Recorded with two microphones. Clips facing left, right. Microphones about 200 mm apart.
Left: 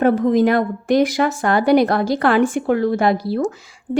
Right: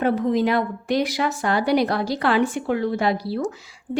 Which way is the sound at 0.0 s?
45° left (ahead or behind).